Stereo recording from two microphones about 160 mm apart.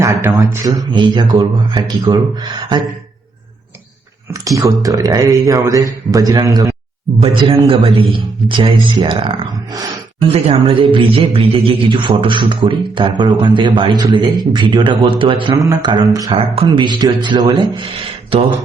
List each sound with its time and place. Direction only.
0.0 s speech: 20° right (ahead or behind)
4.4 s speech: 20° right (ahead or behind)
7.2 s speech: 35° right (ahead or behind)
18.3 s speech: 35° right (ahead or behind)